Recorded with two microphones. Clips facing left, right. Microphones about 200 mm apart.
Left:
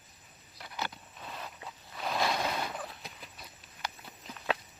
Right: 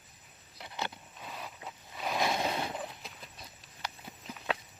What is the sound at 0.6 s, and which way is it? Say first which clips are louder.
Vehicle: even; 25° right (ahead or behind).